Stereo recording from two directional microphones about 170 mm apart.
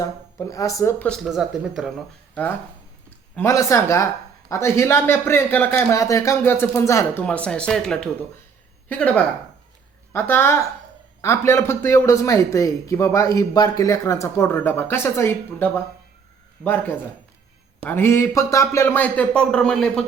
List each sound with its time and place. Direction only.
0.0 s speech: 20° left (ahead or behind); by 1.9 s centre (ahead or behind)
3.3 s speech: 15° left (ahead or behind)
17.8 s speech: 15° left (ahead or behind)